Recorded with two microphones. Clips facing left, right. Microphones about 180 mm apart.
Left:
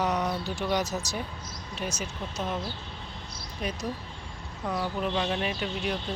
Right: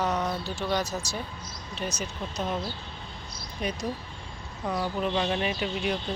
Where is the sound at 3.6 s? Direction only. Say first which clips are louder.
Right 2 dB; centre (ahead or behind).